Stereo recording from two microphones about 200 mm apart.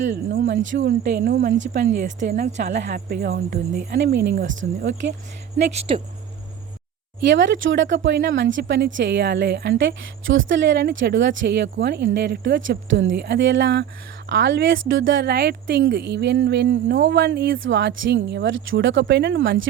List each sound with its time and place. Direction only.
0.1 s speech: 55° right (ahead or behind)
1.7 s speech: 40° right (ahead or behind)
2.7 s speech: 50° right (ahead or behind)
5.9 s speech: 25° right (ahead or behind)
7.2 s speech: 60° right (ahead or behind)